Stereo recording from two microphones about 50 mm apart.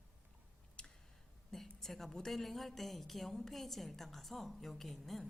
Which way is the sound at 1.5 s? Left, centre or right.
Centre.